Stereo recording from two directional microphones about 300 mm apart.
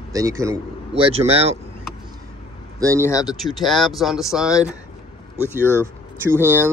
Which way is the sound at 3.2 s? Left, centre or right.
Centre.